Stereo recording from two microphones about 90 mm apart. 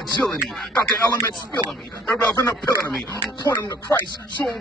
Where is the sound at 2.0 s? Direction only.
25° left (ahead or behind).